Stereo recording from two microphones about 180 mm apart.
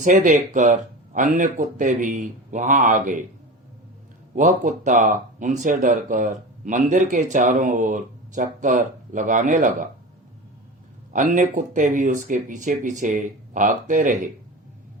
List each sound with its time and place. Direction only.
0.0 s speech: 45° right (ahead or behind)
4.4 s speech: 45° right (ahead or behind)
11.1 s speech: 45° right (ahead or behind)